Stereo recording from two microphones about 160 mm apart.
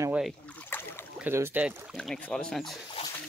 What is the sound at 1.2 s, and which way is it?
Speech, 15° right (ahead or behind).